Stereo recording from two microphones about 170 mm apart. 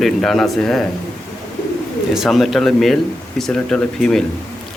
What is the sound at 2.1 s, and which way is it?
A man's voice, centre (ahead or behind).